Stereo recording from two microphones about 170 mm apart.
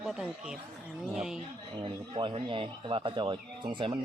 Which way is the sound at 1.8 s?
30° right (ahead or behind).